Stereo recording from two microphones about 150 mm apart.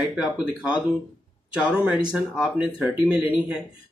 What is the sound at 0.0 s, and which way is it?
Speech, centre (ahead or behind).